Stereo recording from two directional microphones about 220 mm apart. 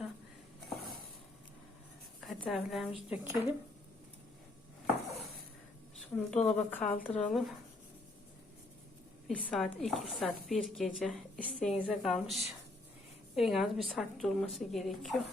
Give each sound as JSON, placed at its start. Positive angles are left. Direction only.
{"t": 2.2, "sound": "a sound", "side_deg": 0}
{"t": 2.9, "sound": "speech", "side_deg": 30}
{"t": 6.1, "sound": "speech", "side_deg": 5}
{"t": 9.2, "sound": "speech", "side_deg": 5}